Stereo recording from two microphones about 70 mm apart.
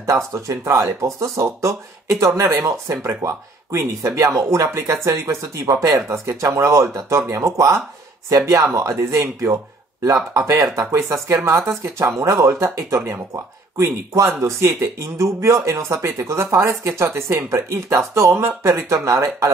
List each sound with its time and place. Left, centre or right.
0.0 s speech: right